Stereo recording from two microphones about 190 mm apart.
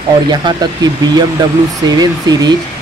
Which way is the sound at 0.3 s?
20° right (ahead or behind).